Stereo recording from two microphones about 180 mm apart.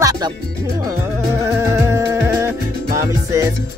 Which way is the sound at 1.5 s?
15° right (ahead or behind).